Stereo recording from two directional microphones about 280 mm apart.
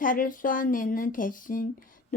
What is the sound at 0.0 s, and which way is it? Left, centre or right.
Speech, left.